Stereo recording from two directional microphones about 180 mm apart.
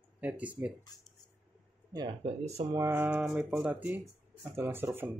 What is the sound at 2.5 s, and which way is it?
Speech, 30° right (ahead or behind).